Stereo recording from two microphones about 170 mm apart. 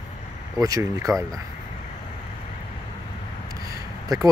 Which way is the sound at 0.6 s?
20° right (ahead or behind).